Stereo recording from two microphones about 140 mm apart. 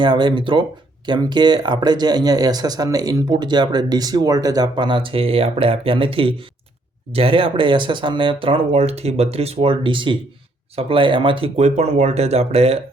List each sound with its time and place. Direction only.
0.0 s speech: 35° right (ahead or behind)